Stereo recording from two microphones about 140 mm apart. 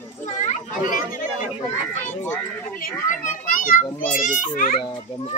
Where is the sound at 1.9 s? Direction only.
15° left (ahead or behind).